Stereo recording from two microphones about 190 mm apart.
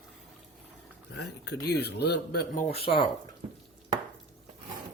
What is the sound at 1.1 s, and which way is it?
A man's voice, 60° left (ahead or behind).